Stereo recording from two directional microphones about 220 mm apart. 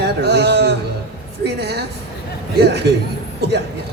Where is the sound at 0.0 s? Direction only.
50° right (ahead or behind).